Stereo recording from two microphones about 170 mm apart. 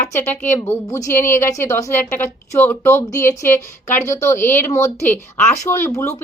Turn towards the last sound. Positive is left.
turn(degrees=15)  # may be behind; listen again after turning